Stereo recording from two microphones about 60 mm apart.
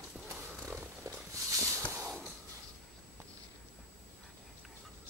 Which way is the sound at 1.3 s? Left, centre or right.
Right.